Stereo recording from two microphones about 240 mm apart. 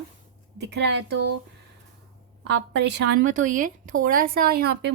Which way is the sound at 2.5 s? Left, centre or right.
Right.